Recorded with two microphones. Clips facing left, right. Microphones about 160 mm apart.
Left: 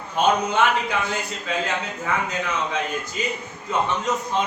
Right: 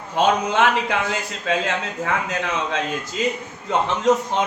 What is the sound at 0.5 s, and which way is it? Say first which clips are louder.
A man's voice: right 2 dB; 80° right.